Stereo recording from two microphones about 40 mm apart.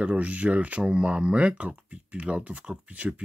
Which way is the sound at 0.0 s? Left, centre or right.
Right.